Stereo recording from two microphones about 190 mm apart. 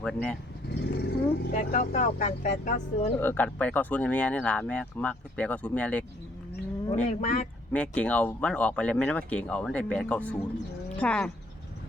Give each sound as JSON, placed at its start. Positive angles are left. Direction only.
{"t": 0.0, "sound": "speech", "side_deg": 5}
{"t": 0.7, "sound": "speech", "side_deg": 60}
{"t": 1.5, "sound": "speech", "side_deg": 40}
{"t": 3.2, "sound": "speech", "side_deg": 10}
{"t": 6.9, "sound": "speech", "side_deg": 40}
{"t": 7.7, "sound": "speech", "side_deg": 5}